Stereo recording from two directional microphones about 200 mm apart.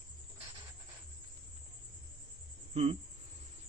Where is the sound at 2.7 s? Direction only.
30° right (ahead or behind).